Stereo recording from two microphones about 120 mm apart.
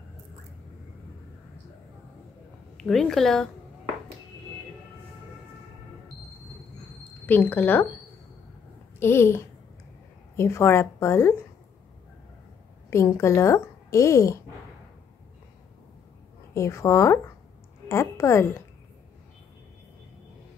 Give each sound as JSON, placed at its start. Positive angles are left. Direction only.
{"t": 2.8, "sound": "a woman's voice", "side_deg": 5}
{"t": 7.2, "sound": "speech", "side_deg": 15}
{"t": 9.0, "sound": "a woman's voice", "side_deg": 20}
{"t": 12.9, "sound": "a woman's voice", "side_deg": 25}
{"t": 16.5, "sound": "a woman's voice", "side_deg": 25}